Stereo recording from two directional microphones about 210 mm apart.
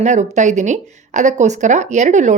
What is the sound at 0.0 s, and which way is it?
A woman's voice, 35° right (ahead or behind).